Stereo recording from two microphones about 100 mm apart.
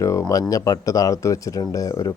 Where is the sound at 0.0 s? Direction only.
35° left (ahead or behind).